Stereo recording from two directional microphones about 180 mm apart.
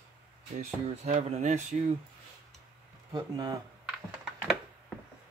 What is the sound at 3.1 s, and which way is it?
Speech, 25° right (ahead or behind).